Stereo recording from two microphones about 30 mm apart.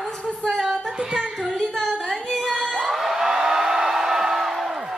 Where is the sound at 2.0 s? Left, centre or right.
Centre.